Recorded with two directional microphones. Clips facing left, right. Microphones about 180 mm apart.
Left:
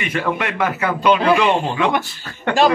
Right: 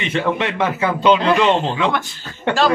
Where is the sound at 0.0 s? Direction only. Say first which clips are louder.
Right 2 dB; 25° right (ahead or behind).